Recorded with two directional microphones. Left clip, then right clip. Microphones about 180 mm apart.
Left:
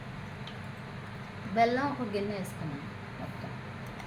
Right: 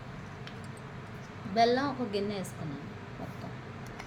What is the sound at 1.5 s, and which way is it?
Speech, 25° right (ahead or behind).